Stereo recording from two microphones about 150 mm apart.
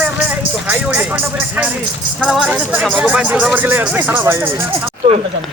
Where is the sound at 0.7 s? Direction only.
10° right (ahead or behind).